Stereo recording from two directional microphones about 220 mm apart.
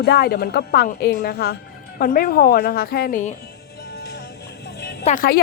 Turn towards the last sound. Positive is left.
turn(degrees=40)  # may be behind; listen again after turning